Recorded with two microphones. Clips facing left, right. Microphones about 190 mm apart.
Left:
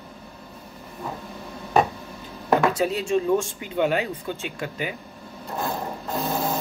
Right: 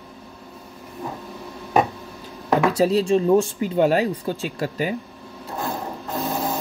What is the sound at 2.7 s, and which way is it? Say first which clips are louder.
Speech: right 5 dB; 35° right (ahead or behind).